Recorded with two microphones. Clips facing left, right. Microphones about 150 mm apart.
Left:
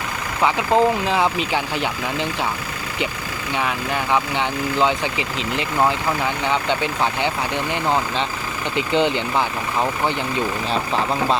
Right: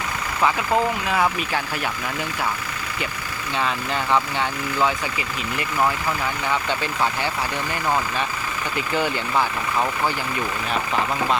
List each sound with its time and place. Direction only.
0.4 s speech: 20° left (ahead or behind)
3.5 s speech: 15° left (ahead or behind)
10.7 s speech: 30° left (ahead or behind)